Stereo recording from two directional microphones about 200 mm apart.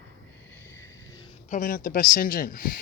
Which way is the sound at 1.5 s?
40° left (ahead or behind).